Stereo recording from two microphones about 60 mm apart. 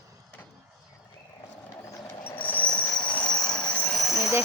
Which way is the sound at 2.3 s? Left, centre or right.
Left.